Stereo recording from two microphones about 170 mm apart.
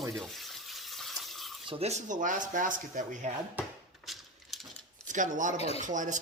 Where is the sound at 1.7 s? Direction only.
35° right (ahead or behind).